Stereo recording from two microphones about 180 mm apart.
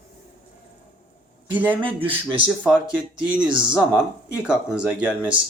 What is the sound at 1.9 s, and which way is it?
Speech, 30° right (ahead or behind).